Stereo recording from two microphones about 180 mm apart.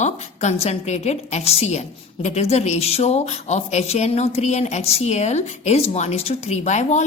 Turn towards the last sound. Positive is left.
turn(degrees=40)  # may be behind; listen again after turning